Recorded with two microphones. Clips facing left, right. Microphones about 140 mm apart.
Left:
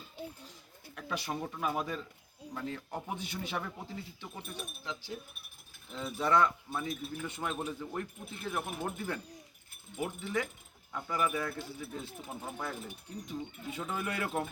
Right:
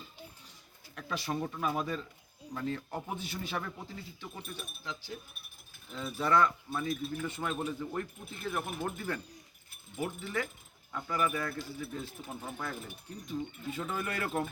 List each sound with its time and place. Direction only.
0.9 s speech: 10° left (ahead or behind)